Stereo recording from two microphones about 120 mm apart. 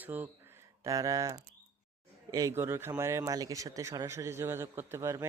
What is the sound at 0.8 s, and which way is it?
Speech, 25° right (ahead or behind).